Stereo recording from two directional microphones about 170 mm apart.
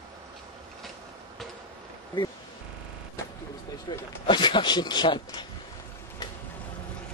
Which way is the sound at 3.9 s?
25° left (ahead or behind).